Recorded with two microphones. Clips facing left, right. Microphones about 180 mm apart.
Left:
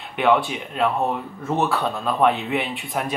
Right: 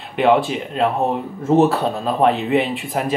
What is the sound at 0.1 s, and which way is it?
Speech, centre (ahead or behind).